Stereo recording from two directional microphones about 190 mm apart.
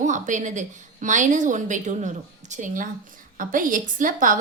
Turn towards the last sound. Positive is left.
turn(degrees=-45)  # may be behind; listen again after turning